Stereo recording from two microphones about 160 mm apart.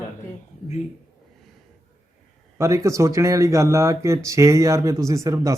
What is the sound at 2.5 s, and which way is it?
Speech, 20° right (ahead or behind).